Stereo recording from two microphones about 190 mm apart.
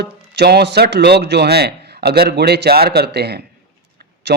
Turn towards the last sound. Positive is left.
turn(degrees=-65)  # may be behind; listen again after turning